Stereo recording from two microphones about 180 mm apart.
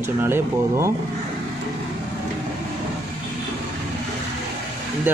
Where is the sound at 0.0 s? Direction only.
15° right (ahead or behind).